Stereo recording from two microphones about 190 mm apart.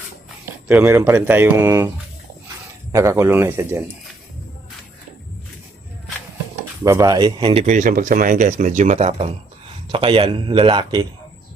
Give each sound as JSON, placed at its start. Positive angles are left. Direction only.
{"t": 0.4, "sound": "speech", "side_deg": -10}
{"t": 2.9, "sound": "speech", "side_deg": -15}
{"t": 6.8, "sound": "a man's voice", "side_deg": -15}